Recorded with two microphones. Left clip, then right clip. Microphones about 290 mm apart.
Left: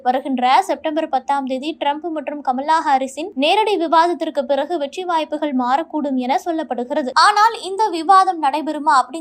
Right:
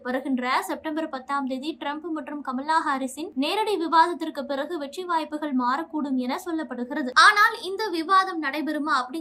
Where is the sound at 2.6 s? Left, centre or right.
Centre.